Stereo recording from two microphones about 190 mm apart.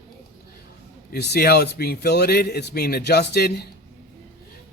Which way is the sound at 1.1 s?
60° left (ahead or behind).